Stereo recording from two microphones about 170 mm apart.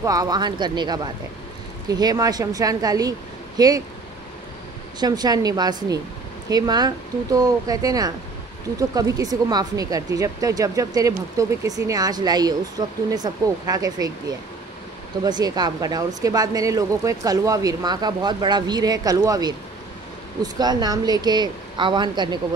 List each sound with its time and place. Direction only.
0.0 s speech: 20° right (ahead or behind)
5.0 s speech: 25° right (ahead or behind)
15.2 s speech: 25° right (ahead or behind)
20.5 s speech: 25° right (ahead or behind)